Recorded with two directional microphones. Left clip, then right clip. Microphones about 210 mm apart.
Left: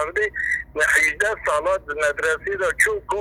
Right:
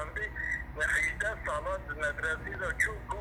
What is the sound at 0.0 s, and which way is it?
Speech, 50° left (ahead or behind).